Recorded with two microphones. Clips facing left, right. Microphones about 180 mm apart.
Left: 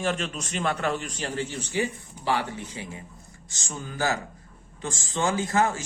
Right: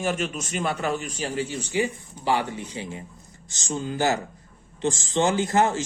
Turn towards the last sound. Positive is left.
turn(degrees=-20)  # may be behind; listen again after turning